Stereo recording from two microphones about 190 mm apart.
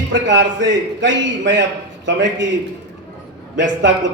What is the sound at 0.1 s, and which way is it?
A man's voice, 70° right (ahead or behind).